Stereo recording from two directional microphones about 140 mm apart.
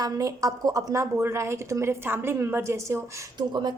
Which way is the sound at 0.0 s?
25° right (ahead or behind).